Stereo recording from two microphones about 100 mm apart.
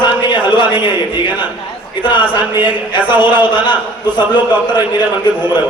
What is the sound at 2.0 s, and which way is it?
Speech, 55° left (ahead or behind).